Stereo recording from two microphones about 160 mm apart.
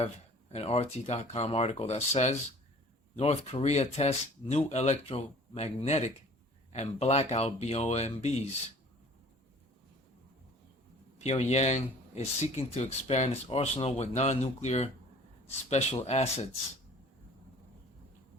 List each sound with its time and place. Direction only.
0.5 s speech: 40° left (ahead or behind)
11.2 s speech: 45° left (ahead or behind)